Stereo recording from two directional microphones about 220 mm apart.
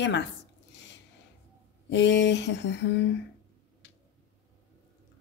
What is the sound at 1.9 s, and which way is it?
A woman's voice, 55° left (ahead or behind).